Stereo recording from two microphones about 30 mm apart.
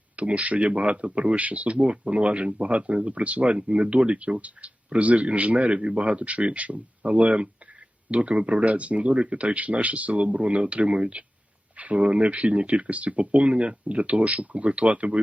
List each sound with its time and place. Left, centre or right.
0.2 s speech: right
8.6 s speech: right
9.2 s speech: right